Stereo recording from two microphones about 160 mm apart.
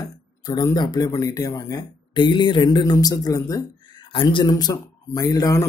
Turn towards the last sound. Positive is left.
turn(degrees=20)  # may be behind; listen again after turning